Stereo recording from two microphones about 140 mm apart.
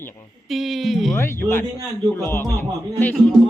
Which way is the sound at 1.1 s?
20° left (ahead or behind).